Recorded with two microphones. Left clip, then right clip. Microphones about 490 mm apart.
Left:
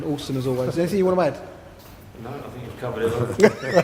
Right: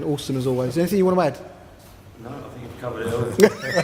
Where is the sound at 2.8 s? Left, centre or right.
Centre.